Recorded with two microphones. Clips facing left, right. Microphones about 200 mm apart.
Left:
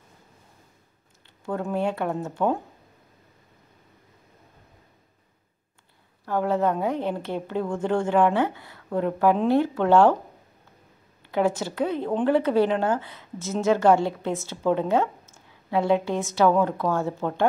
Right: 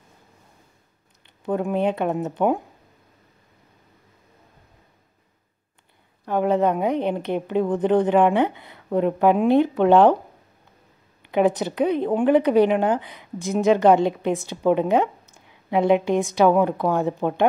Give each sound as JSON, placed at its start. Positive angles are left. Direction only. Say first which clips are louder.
{"t": 1.2, "sound": "speech", "louder": "right 5 dB", "side_deg": -20}
{"t": 6.2, "sound": "a woman's voice", "louder": "right 3 dB", "side_deg": -20}
{"t": 11.2, "sound": "a woman's voice", "louder": "right 4 dB", "side_deg": -20}